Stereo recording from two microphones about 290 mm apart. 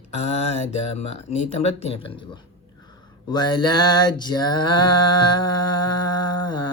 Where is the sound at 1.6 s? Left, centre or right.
Left.